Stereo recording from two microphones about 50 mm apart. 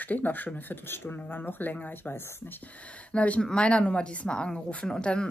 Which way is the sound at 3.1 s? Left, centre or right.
Left.